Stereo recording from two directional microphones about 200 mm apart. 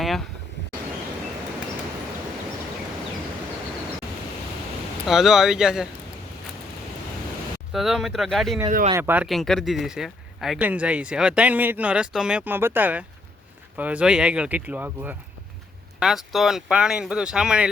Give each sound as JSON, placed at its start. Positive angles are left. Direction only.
{"t": 0.0, "sound": "vehicle", "side_deg": 0}
{"t": 5.0, "sound": "speech", "side_deg": 0}
{"t": 7.7, "sound": "speech", "side_deg": 0}
{"t": 8.9, "sound": "speech", "side_deg": -10}